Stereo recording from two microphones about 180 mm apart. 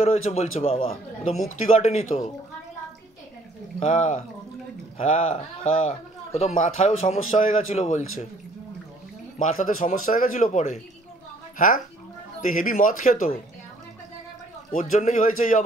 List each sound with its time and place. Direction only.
0.0 s a man's voice: 35° left (ahead or behind)
3.8 s a man's voice: 40° left (ahead or behind)
9.4 s a man's voice: 45° left (ahead or behind)
14.7 s a man's voice: 45° left (ahead or behind)